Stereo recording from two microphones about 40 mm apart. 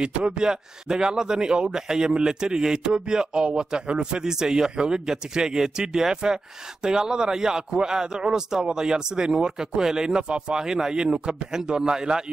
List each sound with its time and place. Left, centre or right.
0.0 s speech: right